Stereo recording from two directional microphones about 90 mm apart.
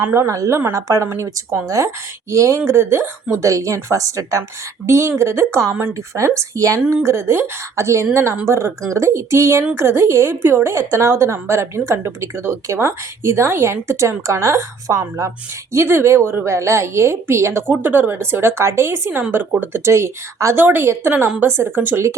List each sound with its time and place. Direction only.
0.0 s a woman's voice: 30° right (ahead or behind)